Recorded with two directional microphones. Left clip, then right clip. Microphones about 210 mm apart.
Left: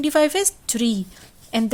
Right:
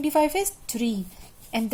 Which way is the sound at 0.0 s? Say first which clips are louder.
Left 4 dB; 35° left (ahead or behind).